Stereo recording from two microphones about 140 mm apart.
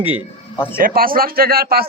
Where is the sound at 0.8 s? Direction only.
90° right.